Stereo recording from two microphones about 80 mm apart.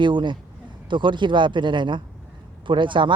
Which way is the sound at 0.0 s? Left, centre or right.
Right.